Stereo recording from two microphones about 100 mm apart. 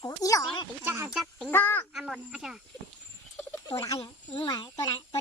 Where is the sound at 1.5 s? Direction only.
20° left (ahead or behind).